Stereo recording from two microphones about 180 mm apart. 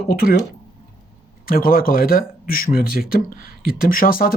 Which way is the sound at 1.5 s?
55° left (ahead or behind).